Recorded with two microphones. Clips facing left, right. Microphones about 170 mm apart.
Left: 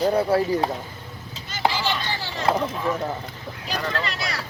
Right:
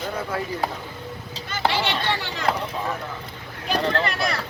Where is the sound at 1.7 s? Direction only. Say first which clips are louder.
Right 2 dB; 65° right (ahead or behind).